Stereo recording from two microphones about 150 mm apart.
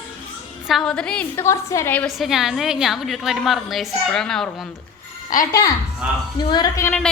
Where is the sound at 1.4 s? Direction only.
20° left (ahead or behind).